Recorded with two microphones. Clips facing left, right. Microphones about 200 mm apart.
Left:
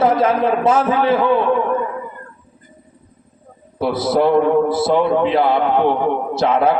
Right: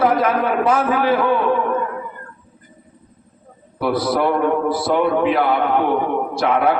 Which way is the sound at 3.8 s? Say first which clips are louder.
Left 2 dB; 25° left (ahead or behind).